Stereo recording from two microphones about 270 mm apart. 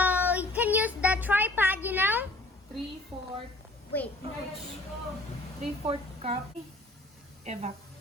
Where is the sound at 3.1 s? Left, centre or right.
Centre.